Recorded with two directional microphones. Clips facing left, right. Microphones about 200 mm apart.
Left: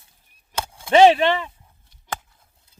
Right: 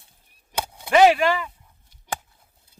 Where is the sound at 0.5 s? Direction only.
15° right (ahead or behind).